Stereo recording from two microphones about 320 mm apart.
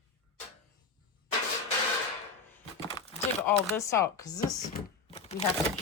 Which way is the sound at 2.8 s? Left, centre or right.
Centre.